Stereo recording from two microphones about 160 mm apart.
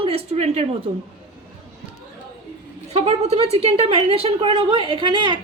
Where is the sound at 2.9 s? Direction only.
40° right (ahead or behind).